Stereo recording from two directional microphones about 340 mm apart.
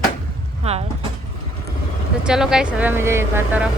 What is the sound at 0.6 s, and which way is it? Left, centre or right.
Speech, centre.